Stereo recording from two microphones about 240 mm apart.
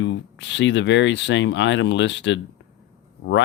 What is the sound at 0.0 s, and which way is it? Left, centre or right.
Speech, left.